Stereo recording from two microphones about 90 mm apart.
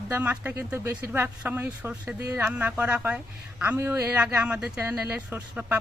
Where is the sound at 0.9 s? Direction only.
15° right (ahead or behind).